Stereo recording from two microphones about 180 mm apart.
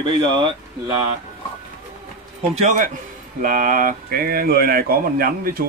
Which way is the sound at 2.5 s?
45° right (ahead or behind).